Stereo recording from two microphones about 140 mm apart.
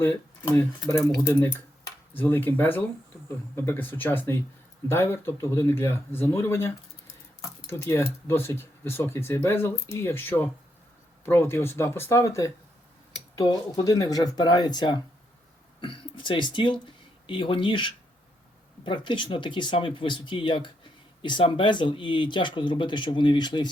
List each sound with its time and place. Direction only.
0.0 s speech: 15° left (ahead or behind); by 23.7 s 30° left (ahead or behind)